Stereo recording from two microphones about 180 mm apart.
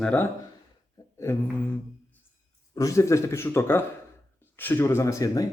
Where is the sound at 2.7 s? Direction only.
15° left (ahead or behind).